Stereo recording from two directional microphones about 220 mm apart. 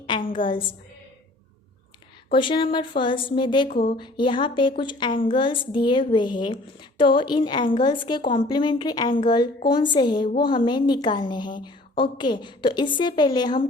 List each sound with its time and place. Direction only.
0.2 s a sound: 40° left (ahead or behind)
2.3 s a woman's voice: 20° left (ahead or behind)
3.7 s speech: 40° left (ahead or behind)
3.9 s a woman's voice: 20° left (ahead or behind)